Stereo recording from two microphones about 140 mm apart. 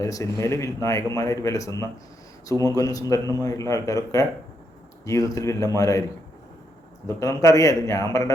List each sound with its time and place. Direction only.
0.0 s a man's voice: 25° left (ahead or behind)
7.2 s a man's voice: 25° left (ahead or behind)